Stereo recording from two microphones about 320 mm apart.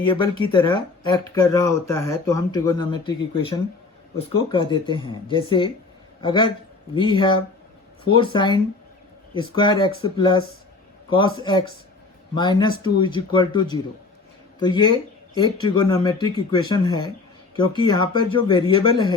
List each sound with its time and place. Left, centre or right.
0.1 s speech: centre